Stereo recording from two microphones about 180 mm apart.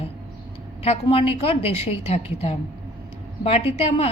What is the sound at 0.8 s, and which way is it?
A woman's voice, 35° left (ahead or behind).